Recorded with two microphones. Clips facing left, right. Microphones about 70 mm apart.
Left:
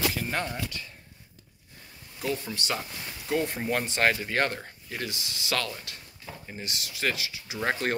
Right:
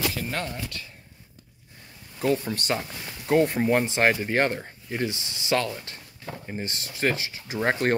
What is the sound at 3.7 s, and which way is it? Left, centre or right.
Speech, right.